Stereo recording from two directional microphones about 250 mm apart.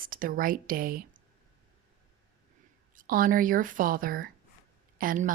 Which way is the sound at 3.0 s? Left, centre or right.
Right.